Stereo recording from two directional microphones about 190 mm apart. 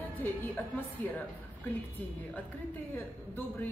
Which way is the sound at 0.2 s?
10° left (ahead or behind).